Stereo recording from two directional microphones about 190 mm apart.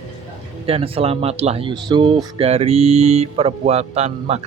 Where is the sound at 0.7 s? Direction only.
30° right (ahead or behind).